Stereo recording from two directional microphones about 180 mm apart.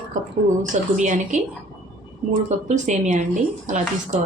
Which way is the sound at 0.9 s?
45° right (ahead or behind).